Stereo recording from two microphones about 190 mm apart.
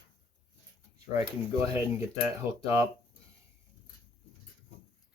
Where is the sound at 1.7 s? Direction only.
15° right (ahead or behind).